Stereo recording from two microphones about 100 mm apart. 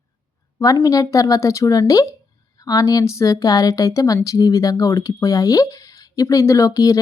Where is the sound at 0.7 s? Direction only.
40° left (ahead or behind).